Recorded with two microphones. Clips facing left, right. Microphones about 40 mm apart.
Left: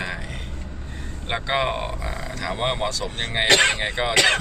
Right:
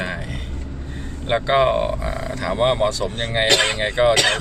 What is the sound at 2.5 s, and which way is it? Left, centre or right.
Speech, centre.